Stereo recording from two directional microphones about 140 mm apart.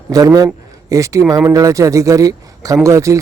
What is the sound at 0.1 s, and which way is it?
A man's voice, 25° right (ahead or behind).